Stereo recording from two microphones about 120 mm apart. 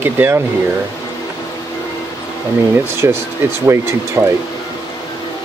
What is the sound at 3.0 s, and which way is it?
Speech, 25° right (ahead or behind).